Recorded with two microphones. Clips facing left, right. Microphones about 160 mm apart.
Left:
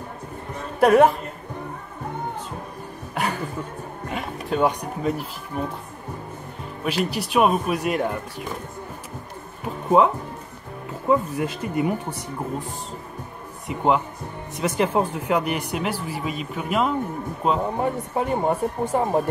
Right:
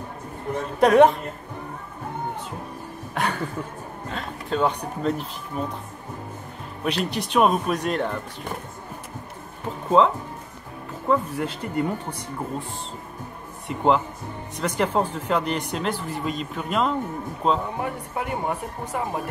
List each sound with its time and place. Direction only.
0.7 s speech: 5° left (ahead or behind)
3.2 s a sound: 5° left (ahead or behind)
4.1 s speech: 15° left (ahead or behind)
6.8 s speech: 5° left (ahead or behind)
9.8 s speech: 15° left (ahead or behind)
13.7 s speech: 5° left (ahead or behind)
17.7 s speech: 30° left (ahead or behind)